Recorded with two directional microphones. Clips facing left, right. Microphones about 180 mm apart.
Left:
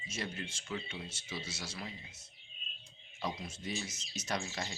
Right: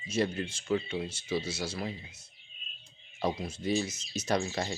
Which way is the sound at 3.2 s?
35° right (ahead or behind).